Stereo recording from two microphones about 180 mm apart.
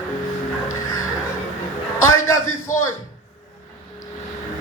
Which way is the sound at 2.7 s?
45° left (ahead or behind).